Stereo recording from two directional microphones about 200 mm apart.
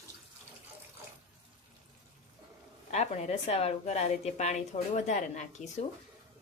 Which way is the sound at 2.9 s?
30° left (ahead or behind).